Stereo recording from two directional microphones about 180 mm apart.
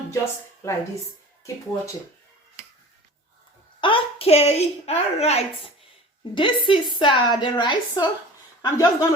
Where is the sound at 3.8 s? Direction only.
30° left (ahead or behind).